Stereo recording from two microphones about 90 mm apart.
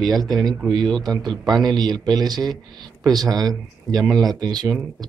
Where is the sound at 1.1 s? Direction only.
Centre (ahead or behind).